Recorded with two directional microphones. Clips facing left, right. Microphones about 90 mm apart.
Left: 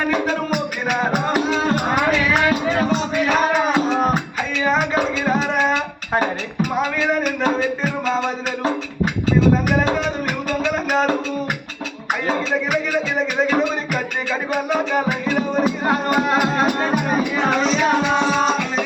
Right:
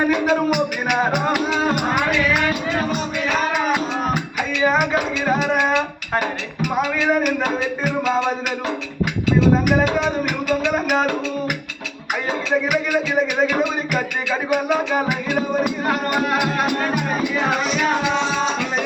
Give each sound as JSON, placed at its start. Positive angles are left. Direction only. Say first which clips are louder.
{"t": 0.5, "sound": "music", "louder": "right 2 dB", "side_deg": 35}
{"t": 4.6, "sound": "music", "louder": "even", "side_deg": -5}
{"t": 14.7, "sound": "music", "louder": "even", "side_deg": 0}
{"t": 16.2, "sound": "speech", "louder": "left 2 dB", "side_deg": 25}